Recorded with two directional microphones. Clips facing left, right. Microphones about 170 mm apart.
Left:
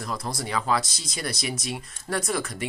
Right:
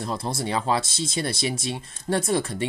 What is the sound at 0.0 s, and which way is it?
Speech, 25° right (ahead or behind).